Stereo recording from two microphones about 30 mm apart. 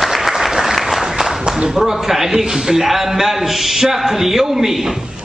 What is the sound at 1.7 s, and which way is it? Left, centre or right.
A man's voice, centre.